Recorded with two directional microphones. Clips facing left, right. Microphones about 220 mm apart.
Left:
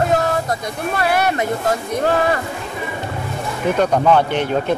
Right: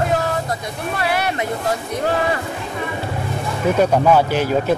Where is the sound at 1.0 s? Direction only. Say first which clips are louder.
Left 3 dB; 45° left (ahead or behind).